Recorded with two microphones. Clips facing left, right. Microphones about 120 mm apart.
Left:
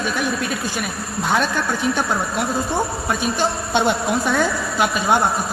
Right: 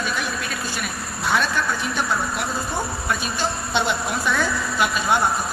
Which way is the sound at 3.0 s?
50° left (ahead or behind).